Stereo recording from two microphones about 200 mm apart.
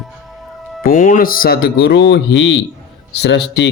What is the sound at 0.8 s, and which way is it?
Speech, 45° left (ahead or behind).